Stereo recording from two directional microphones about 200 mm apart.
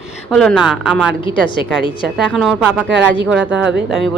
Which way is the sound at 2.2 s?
Centre (ahead or behind).